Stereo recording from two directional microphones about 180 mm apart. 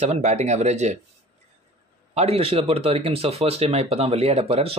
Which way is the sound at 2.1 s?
35° right (ahead or behind).